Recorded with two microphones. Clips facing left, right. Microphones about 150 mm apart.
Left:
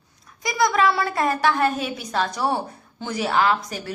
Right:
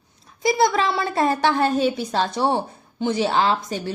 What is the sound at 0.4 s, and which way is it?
Speech, 30° right (ahead or behind).